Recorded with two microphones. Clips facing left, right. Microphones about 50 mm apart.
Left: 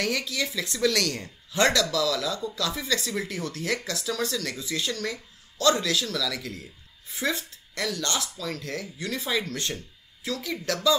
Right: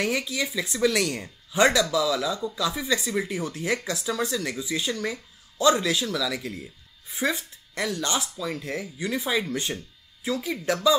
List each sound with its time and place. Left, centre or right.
0.0 s speech: centre